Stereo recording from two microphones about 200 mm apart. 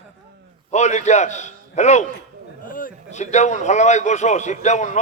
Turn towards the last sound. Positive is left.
turn(degrees=35)  # may be behind; listen again after turning